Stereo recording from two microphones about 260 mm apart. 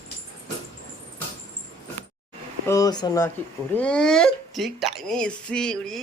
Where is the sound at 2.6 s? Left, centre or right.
Centre.